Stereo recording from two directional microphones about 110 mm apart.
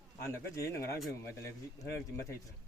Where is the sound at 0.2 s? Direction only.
25° left (ahead or behind).